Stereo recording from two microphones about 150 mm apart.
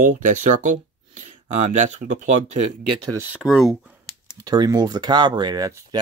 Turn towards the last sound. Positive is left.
turn(degrees=-20)  # may be behind; listen again after turning